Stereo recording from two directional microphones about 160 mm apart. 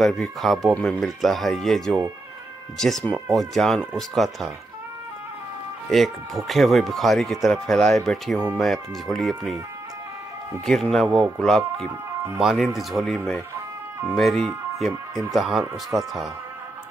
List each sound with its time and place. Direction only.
0.0 s speech: centre (ahead or behind)
5.9 s speech: centre (ahead or behind)
10.6 s speech: 5° left (ahead or behind)